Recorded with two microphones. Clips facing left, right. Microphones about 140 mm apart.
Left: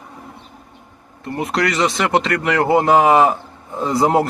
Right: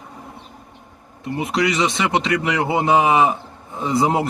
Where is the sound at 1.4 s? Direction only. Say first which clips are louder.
Left 1 dB; centre (ahead or behind).